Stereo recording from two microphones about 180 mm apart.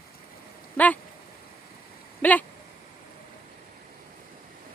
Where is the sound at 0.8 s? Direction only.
10° left (ahead or behind).